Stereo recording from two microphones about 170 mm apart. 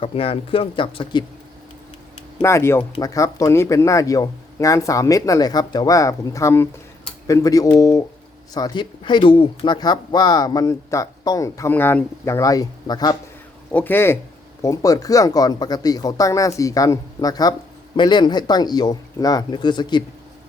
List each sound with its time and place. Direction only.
0.0 s speech: 35° left (ahead or behind)
2.4 s speech: 15° left (ahead or behind)
13.7 s speech: 10° left (ahead or behind); by 20.1 s 25° left (ahead or behind)